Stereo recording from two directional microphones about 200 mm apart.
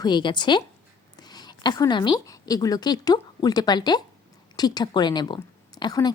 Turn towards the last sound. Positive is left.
turn(degrees=20)  # may be behind; listen again after turning